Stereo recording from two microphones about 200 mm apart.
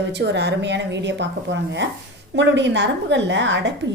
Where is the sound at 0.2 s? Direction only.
60° right (ahead or behind).